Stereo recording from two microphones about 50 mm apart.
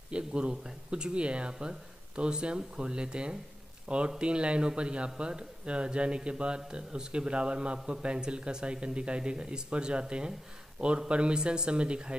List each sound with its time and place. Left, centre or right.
0.1 s a man's voice: centre